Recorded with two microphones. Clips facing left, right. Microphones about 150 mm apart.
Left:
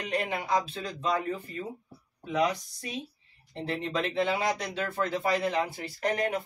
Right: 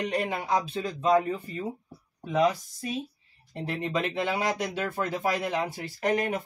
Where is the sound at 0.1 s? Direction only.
15° right (ahead or behind).